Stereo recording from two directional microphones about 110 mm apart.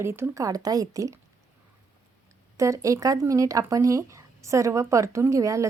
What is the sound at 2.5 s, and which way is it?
Speech, 30° right (ahead or behind).